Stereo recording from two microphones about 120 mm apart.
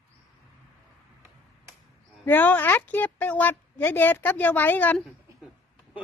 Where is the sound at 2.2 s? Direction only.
15° left (ahead or behind).